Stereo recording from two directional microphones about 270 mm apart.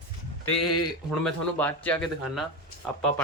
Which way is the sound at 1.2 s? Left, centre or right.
Centre.